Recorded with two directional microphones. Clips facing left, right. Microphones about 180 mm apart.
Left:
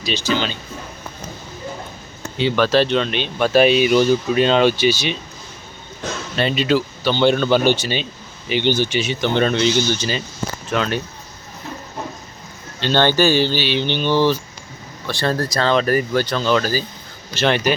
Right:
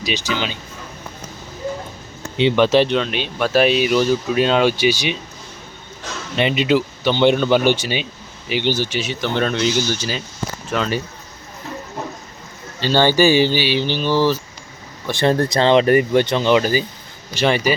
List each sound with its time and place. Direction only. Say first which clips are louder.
0.0 s speech: left 2 dB; 15° right (ahead or behind)
2.4 s speech: right 2 dB; 25° right (ahead or behind)
3.0 s speech: left 1 dB; 5° right (ahead or behind)
6.3 s speech: right 1 dB; 15° right (ahead or behind); by 11.0 s centre (ahead or behind)
12.8 s speech: right 1 dB; 10° right (ahead or behind)
15.0 s speech: right 4 dB; 20° right (ahead or behind)